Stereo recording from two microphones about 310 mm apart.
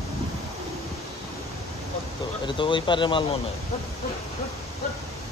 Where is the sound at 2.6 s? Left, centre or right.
Centre.